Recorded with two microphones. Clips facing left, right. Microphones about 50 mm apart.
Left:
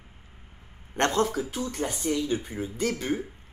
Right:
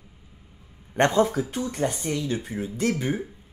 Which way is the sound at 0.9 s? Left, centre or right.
Centre.